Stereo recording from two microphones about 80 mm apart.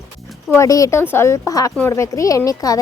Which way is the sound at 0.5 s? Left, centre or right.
Left.